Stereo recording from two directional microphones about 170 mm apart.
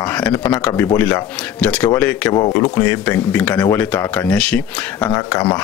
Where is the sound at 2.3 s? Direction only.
25° left (ahead or behind).